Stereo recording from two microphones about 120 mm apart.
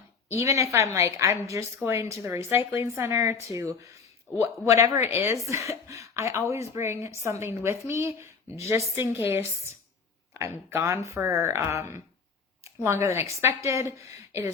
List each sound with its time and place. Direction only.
0.3 s a woman's voice: 25° right (ahead or behind)